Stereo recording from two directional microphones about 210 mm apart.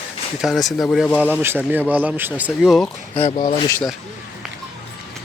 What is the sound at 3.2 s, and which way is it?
Speech, 25° left (ahead or behind).